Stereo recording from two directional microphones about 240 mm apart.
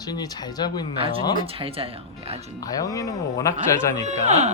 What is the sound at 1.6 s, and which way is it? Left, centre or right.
Speech, right.